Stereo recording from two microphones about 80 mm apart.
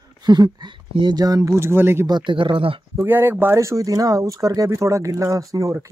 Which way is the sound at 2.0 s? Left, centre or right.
Right.